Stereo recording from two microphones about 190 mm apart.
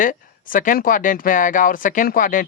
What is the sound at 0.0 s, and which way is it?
Speech, 45° left (ahead or behind).